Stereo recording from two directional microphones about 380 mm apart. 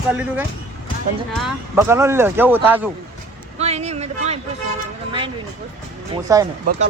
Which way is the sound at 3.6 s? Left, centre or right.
Centre.